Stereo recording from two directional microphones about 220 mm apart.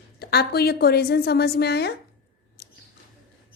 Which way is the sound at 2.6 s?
45° left (ahead or behind).